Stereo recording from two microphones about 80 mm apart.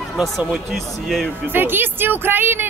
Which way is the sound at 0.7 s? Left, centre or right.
Centre.